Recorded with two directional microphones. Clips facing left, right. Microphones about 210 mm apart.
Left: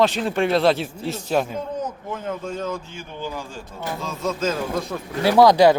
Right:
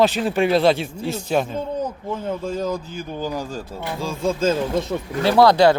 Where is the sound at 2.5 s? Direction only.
35° right (ahead or behind).